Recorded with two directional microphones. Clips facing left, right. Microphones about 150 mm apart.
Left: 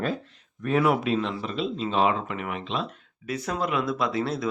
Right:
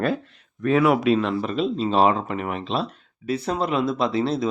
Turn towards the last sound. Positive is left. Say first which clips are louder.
# right 4 dB
turn(degrees=-25)  # may be behind; listen again after turning